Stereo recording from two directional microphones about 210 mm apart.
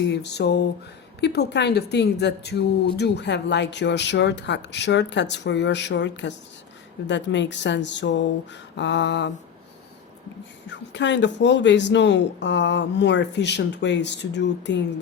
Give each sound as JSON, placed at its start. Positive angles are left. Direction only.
{"t": 0.0, "sound": "a sound", "side_deg": 55}
{"t": 1.2, "sound": "speech", "side_deg": 50}
{"t": 10.7, "sound": "speech", "side_deg": 60}